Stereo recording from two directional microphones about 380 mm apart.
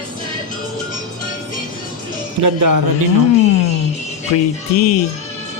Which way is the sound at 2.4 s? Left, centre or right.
Right.